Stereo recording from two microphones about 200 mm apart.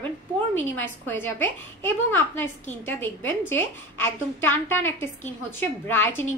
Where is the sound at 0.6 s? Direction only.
10° left (ahead or behind).